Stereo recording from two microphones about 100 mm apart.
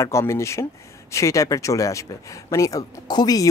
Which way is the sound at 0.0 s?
30° left (ahead or behind).